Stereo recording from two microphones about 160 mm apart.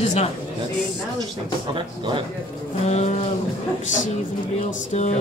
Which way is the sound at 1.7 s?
30° right (ahead or behind).